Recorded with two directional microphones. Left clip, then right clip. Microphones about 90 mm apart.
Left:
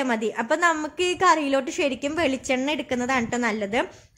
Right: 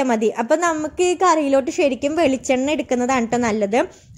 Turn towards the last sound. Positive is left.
turn(degrees=-35)  # may be behind; listen again after turning